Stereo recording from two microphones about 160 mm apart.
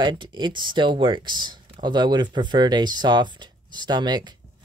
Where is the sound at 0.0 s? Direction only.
30° right (ahead or behind).